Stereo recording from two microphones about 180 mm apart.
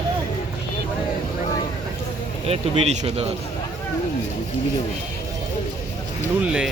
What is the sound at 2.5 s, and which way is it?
Speech, 35° right (ahead or behind).